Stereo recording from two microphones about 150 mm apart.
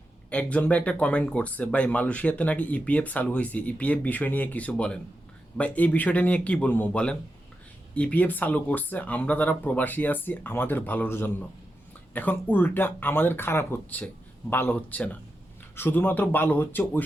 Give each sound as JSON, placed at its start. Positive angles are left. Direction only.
{"t": 0.3, "sound": "speech", "side_deg": 10}